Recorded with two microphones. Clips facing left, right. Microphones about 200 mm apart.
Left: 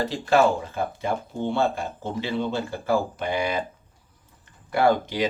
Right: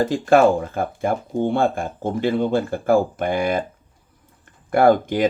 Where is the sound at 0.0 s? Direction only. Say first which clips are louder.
Right 5 dB; 50° right (ahead or behind).